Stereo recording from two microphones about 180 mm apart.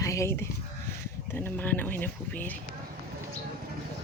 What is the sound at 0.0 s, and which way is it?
Sheep, 15° left (ahead or behind).